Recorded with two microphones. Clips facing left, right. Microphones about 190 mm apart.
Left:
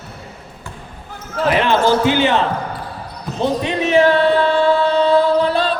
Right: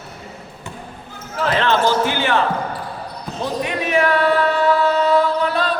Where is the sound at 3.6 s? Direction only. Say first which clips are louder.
Left 5 dB; 25° left (ahead or behind).